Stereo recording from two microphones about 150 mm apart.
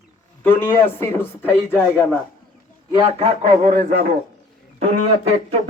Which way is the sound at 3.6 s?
70° right (ahead or behind).